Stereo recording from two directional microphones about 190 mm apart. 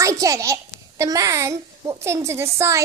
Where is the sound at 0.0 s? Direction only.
15° right (ahead or behind).